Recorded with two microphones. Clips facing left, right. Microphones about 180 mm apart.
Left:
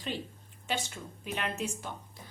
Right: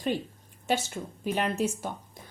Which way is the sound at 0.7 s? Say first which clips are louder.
Right 7 dB; 40° right (ahead or behind).